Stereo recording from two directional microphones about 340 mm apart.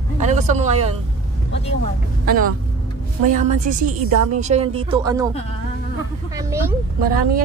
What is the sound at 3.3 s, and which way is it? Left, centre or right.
Speech, right.